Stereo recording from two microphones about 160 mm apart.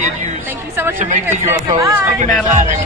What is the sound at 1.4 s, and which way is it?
Speech, 20° right (ahead or behind).